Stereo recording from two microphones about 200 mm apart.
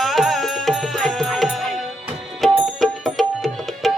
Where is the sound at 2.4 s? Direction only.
Centre (ahead or behind).